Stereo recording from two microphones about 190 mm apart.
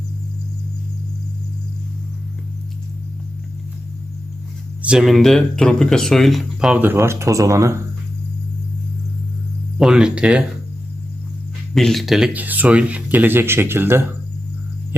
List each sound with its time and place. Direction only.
4.8 s speech: 5° right (ahead or behind)
9.7 s speech: 5° right (ahead or behind)
11.7 s speech: centre (ahead or behind)